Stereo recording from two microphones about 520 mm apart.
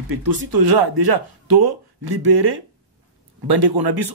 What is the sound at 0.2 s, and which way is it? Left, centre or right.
Speech, right.